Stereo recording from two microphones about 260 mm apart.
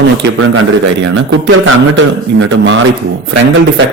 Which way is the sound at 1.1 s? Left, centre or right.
Right.